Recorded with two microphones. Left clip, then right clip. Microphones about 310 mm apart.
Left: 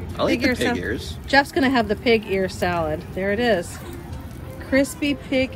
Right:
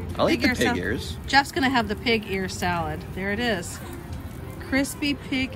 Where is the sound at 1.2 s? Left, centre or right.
Centre.